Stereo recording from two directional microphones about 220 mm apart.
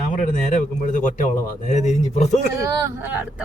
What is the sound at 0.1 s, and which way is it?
A man's voice, 35° left (ahead or behind).